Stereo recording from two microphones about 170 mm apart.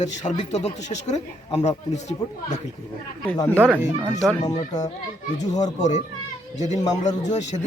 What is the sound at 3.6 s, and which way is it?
Speech, 10° right (ahead or behind).